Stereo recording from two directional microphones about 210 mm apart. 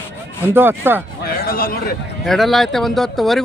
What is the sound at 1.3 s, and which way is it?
Speech, 45° left (ahead or behind).